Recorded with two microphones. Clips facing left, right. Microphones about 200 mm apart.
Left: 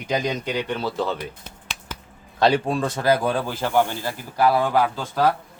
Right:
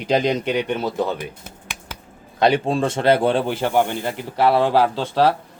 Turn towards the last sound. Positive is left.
turn(degrees=-30)  # may be behind; listen again after turning